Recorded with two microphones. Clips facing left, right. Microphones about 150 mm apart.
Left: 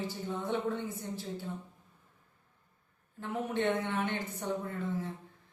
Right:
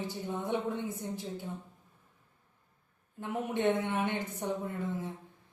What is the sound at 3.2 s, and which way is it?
Speech, 15° right (ahead or behind).